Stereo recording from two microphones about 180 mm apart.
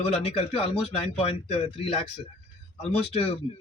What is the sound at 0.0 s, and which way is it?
Speech, 35° left (ahead or behind).